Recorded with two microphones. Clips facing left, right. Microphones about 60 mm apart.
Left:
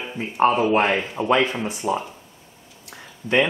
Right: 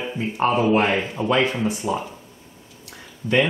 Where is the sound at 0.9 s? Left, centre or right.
Centre.